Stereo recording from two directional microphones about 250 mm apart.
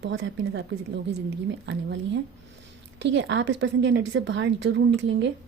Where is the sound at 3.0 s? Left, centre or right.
Right.